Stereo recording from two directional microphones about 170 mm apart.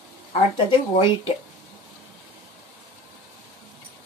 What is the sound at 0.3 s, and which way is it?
Speech, 35° left (ahead or behind).